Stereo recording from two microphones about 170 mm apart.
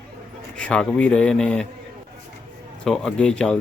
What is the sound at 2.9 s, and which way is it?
Speech, 5° left (ahead or behind).